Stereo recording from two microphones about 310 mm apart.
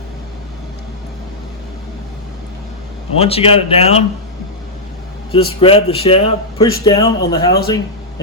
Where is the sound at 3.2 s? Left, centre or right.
Centre.